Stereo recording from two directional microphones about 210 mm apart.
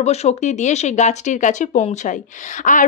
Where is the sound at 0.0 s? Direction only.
30° left (ahead or behind).